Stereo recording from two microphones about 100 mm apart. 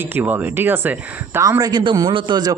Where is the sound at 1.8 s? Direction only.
50° right (ahead or behind).